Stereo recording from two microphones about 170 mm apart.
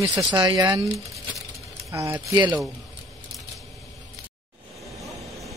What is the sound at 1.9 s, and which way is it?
Speech, 15° right (ahead or behind).